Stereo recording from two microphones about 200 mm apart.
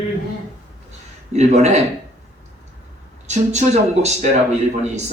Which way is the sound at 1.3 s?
35° right (ahead or behind).